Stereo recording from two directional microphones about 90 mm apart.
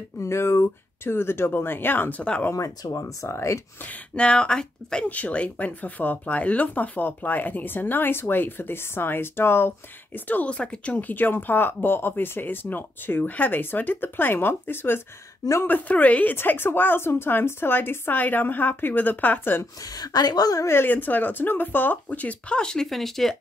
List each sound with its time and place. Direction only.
0.2 s speech: 30° left (ahead or behind); by 2.5 s 15° left (ahead or behind)
2.5 s speech: 40° left (ahead or behind)
4.1 s speech: 10° left (ahead or behind)
19.6 s a woman's voice: 45° left (ahead or behind)
20.6 s speech: 25° left (ahead or behind); by 23.3 s centre (ahead or behind)